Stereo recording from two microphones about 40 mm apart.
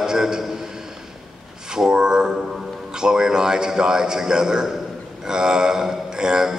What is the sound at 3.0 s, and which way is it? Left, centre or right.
A man's voice, centre.